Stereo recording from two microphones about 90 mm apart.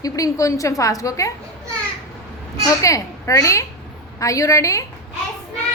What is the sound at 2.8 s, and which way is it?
A woman's voice, 35° left (ahead or behind).